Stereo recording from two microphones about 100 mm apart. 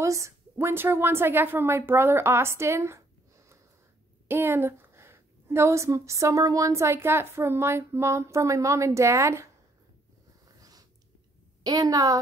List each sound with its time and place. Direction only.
0.0 s a woman's voice: 30° right (ahead or behind)
10.6 s biting: 40° right (ahead or behind)
11.6 s a woman's voice: 40° right (ahead or behind)